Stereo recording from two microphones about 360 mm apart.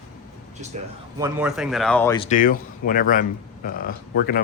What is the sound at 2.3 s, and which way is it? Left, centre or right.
Speech, left.